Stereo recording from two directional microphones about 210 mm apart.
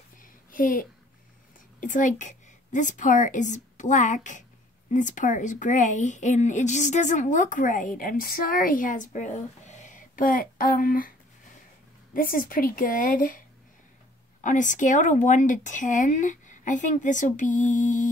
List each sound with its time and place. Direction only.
0.2 s a sound: 40° left (ahead or behind)
1.8 s a woman's voice: 35° left (ahead or behind)
14.4 s a woman's voice: 35° left (ahead or behind)